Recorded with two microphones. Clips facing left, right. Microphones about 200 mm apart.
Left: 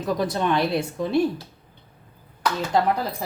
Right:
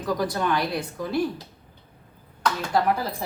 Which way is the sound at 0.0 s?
25° left (ahead or behind).